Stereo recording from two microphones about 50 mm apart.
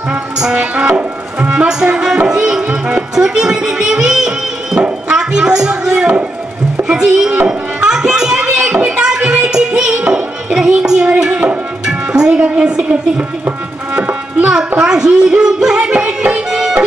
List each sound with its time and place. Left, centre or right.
0.4 s music: centre
5.1 s a sound: centre
11.2 s tabla: right
12.1 s a woman's voice: centre
14.4 s music: centre
14.8 s speech: centre